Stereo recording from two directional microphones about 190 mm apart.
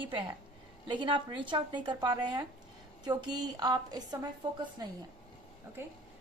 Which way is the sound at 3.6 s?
20° right (ahead or behind).